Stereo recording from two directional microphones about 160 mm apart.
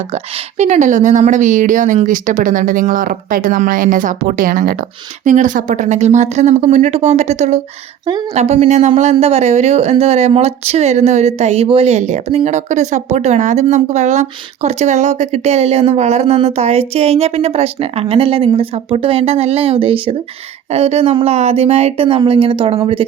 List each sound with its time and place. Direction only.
0.6 s speech: 50° right (ahead or behind)